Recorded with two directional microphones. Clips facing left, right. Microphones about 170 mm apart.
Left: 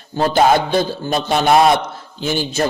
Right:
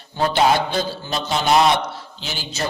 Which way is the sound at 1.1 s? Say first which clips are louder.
Left 4 dB; 55° left (ahead or behind).